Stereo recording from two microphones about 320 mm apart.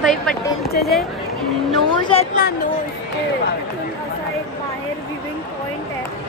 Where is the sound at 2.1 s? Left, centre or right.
Left.